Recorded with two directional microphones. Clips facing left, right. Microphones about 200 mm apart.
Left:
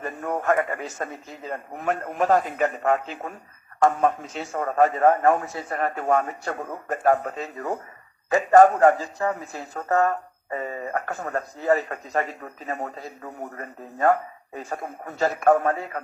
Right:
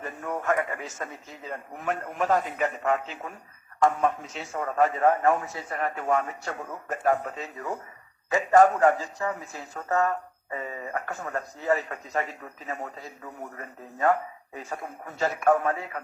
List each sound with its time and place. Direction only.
0.0 s radio: 40° left (ahead or behind)
1.5 s a man's voice: 40° left (ahead or behind)
6.9 s a man's voice: 40° left (ahead or behind)
9.5 s speech: 40° left (ahead or behind)